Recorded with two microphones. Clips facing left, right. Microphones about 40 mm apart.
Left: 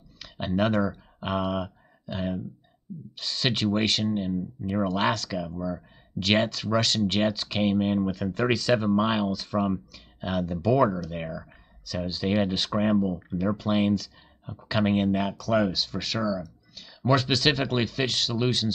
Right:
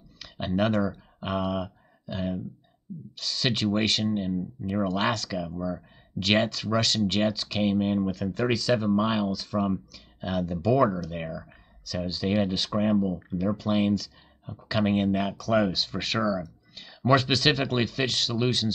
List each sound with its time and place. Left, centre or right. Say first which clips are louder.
0.2 s speech: left 1 dB; centre